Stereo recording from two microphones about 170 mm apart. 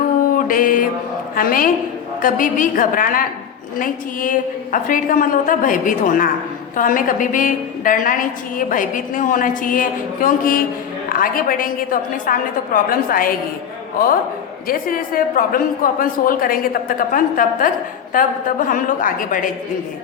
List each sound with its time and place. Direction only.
0.3 s mantra: 55° left (ahead or behind)
1.4 s a woman's voice: 55° left (ahead or behind)
14.7 s a woman's voice: 55° left (ahead or behind)